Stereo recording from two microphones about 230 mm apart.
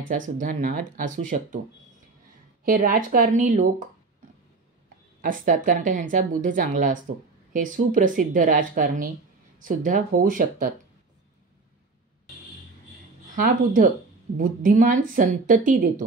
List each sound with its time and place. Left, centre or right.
0.1 s a woman's voice: right
2.6 s a woman's voice: right
5.2 s a woman's voice: right
14.3 s a woman's voice: right